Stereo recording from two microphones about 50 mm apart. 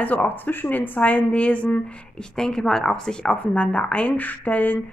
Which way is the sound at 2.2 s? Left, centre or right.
Centre.